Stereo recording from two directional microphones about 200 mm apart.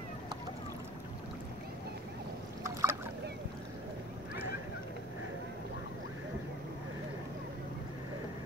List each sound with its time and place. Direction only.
2.6 s boat: 15° right (ahead or behind)